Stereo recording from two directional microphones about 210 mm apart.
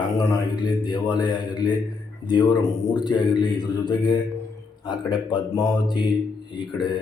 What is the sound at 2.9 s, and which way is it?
A man's voice, 20° left (ahead or behind).